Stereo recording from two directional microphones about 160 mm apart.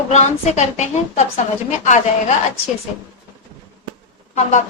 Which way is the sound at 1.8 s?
45° left (ahead or behind).